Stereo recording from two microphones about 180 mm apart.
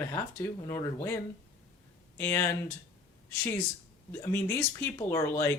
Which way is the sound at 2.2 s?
15° left (ahead or behind).